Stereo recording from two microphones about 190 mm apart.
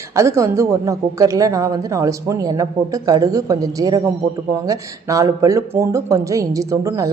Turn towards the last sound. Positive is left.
turn(degrees=-15)  # may be behind; listen again after turning